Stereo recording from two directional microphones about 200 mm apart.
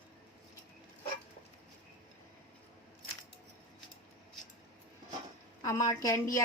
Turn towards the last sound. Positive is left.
turn(degrees=15)  # may be behind; listen again after turning